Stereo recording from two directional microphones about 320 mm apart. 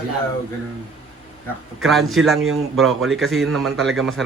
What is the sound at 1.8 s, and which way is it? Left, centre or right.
A man's voice, centre.